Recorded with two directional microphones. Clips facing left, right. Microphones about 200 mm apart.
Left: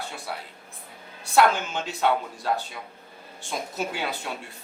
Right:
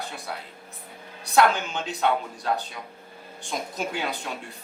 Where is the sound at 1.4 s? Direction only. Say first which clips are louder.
Even; 5° left (ahead or behind).